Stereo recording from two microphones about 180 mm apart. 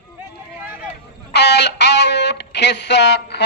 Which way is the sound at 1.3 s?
70° left (ahead or behind).